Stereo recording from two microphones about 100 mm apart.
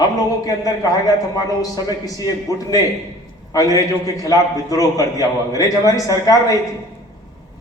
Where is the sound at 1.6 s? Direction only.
40° left (ahead or behind).